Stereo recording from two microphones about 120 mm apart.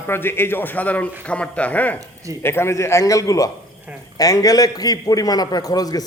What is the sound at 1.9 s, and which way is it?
Speech, 25° right (ahead or behind).